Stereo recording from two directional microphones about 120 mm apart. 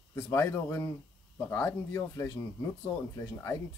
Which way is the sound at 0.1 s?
25° left (ahead or behind).